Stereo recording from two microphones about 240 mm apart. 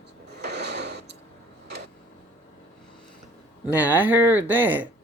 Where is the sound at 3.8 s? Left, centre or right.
Centre.